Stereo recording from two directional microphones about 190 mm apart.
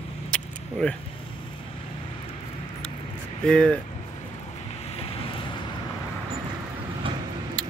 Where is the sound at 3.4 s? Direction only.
5° left (ahead or behind).